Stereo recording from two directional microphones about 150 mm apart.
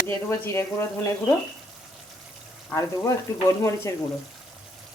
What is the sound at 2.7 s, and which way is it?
Speech, 20° left (ahead or behind).